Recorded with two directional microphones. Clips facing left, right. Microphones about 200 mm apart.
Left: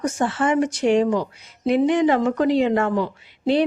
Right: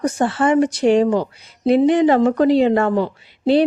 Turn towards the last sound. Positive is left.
turn(degrees=-30)  # may be behind; listen again after turning